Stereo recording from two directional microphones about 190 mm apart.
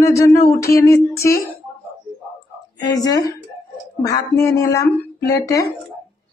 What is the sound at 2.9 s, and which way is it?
A woman's voice, 20° left (ahead or behind).